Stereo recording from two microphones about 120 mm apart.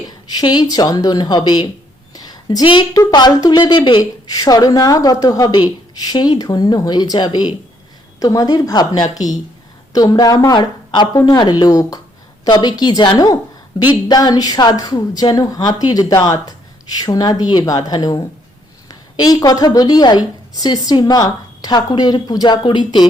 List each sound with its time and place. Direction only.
0.3 s a woman's voice: 35° left (ahead or behind)
2.1 s a sound: 35° left (ahead or behind)
2.9 s a woman's voice: 35° left (ahead or behind)
4.3 s a woman's voice: 30° left (ahead or behind)